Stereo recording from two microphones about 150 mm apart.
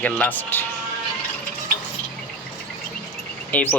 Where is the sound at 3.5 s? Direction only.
10° left (ahead or behind).